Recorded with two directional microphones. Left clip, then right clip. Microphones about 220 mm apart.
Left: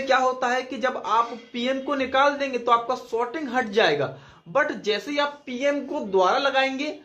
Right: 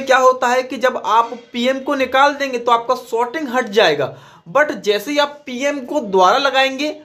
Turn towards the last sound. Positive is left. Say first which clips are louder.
# right 7 dB
turn(degrees=-20)  # may be behind; listen again after turning